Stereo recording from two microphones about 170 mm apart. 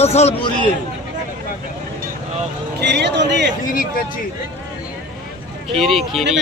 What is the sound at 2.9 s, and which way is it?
Speech, 85° right.